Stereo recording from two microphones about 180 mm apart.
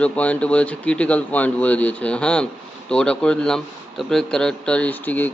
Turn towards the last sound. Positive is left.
turn(degrees=10)  # may be behind; listen again after turning